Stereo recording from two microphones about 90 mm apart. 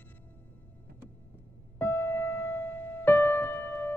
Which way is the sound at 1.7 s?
20° left (ahead or behind).